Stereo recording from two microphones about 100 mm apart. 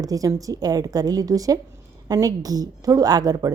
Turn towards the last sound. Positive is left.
turn(degrees=-40)  # may be behind; listen again after turning